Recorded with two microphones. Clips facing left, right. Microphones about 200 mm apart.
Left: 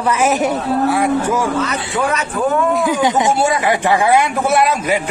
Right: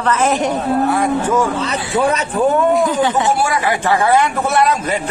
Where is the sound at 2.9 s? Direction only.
15° left (ahead or behind).